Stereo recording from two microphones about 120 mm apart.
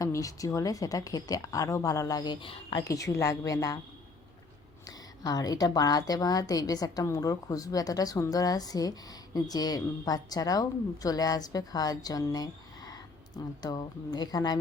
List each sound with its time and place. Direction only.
0.0 s speech: 30° left (ahead or behind); by 2.8 s 45° left (ahead or behind)
2.8 s speech: 30° left (ahead or behind)
4.9 s a woman's voice: 35° left (ahead or behind)